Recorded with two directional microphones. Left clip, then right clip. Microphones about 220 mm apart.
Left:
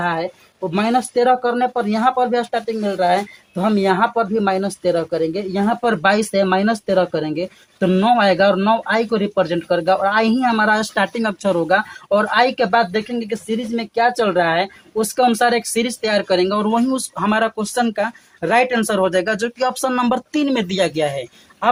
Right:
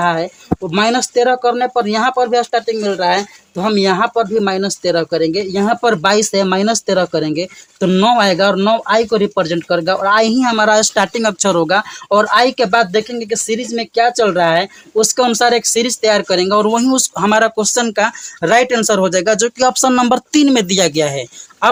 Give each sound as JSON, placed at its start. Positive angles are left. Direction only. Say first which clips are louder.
{"t": 0.0, "sound": "speech", "louder": "right 5 dB", "side_deg": -45}